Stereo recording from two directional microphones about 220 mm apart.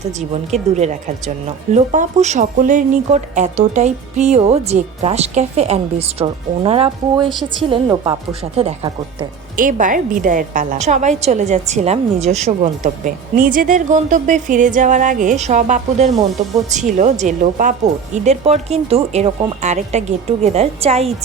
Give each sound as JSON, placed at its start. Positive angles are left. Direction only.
{"t": 0.5, "sound": "a woman's voice", "side_deg": -30}
{"t": 9.6, "sound": "speech", "side_deg": -35}